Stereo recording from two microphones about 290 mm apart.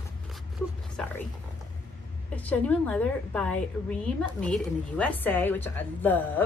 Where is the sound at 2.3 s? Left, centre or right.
Centre.